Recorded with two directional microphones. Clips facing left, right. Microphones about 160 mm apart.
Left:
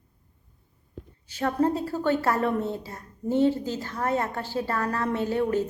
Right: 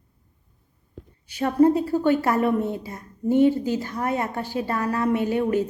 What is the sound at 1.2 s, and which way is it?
A woman's voice, 15° right (ahead or behind).